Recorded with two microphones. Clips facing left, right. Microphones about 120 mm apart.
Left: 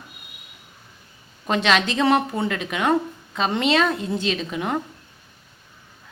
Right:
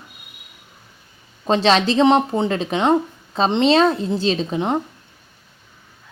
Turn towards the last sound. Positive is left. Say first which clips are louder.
# right 4 dB
turn(degrees=-25)  # may be behind; listen again after turning